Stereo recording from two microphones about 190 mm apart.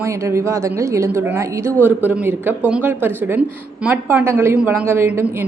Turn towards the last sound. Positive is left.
turn(degrees=-10)  # may be behind; listen again after turning